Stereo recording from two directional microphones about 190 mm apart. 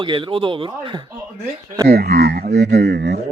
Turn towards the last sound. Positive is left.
turn(degrees=-60)  # may be behind; listen again after turning